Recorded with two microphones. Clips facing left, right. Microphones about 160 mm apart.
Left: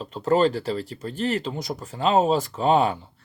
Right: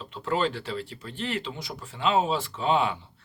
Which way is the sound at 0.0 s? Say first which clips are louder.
Left 7 dB; 40° left (ahead or behind).